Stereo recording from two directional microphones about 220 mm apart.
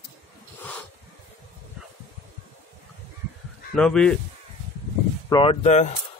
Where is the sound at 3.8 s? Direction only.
5° left (ahead or behind).